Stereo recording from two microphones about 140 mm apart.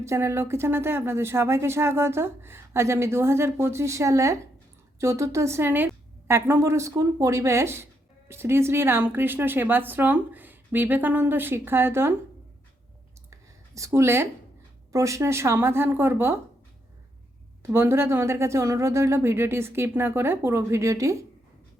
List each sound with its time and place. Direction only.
0.0 s speech: 20° right (ahead or behind)
13.7 s speech: 20° right (ahead or behind)
17.6 s speech: 15° right (ahead or behind)